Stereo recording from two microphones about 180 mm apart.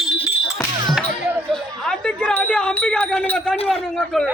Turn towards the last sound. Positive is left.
turn(degrees=5)  # may be behind; listen again after turning